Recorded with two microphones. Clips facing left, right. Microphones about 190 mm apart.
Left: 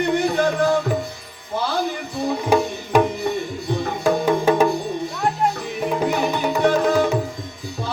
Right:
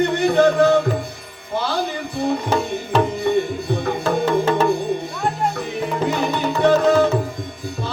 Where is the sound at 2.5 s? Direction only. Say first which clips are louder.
Left 2 dB; 10° left (ahead or behind).